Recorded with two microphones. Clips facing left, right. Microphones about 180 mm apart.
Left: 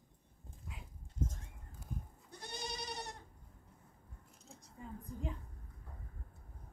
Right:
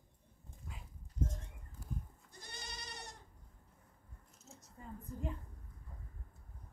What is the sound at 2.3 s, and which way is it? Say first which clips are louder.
Goat: left 7 dB; 65° left (ahead or behind).